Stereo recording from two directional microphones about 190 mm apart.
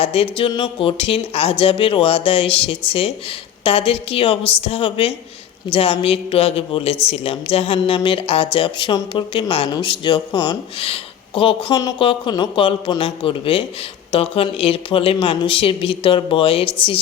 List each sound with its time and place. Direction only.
0.0 s speech: 30° left (ahead or behind)